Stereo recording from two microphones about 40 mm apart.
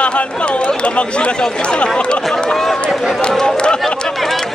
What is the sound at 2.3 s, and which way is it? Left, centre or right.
Speech, centre.